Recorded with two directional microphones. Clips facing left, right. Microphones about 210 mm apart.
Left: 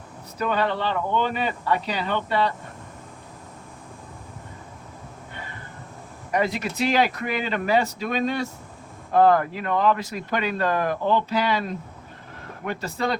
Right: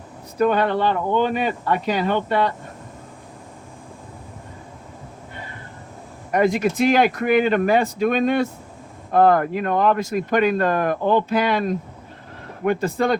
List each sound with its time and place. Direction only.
0.3 s speech: 50° right (ahead or behind)
6.3 s speech: 50° right (ahead or behind)
12.6 s speech: 50° right (ahead or behind)